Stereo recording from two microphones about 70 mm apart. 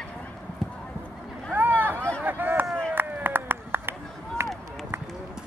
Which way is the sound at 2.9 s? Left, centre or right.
Right.